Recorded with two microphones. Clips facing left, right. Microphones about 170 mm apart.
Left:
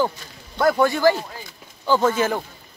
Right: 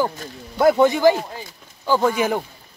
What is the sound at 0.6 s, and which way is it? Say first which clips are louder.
Speech: right 3 dB; 20° right (ahead or behind).